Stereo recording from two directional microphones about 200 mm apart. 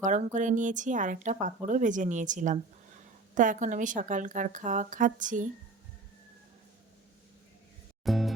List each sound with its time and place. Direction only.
0.0 s speech: 40° right (ahead or behind)
8.0 s music: centre (ahead or behind)